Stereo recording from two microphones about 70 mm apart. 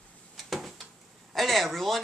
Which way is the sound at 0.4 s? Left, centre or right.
Centre.